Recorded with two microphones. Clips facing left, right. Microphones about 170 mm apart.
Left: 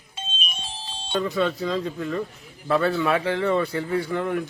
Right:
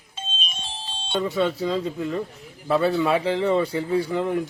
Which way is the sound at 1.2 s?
15° right (ahead or behind).